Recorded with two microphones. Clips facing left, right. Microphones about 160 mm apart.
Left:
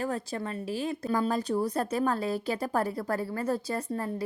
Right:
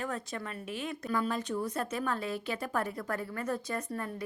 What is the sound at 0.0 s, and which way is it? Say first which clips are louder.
A woman's voice: left 5 dB; 35° left (ahead or behind).